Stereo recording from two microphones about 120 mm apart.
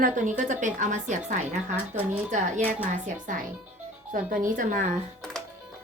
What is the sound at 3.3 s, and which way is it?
A woman's voice, 90° right.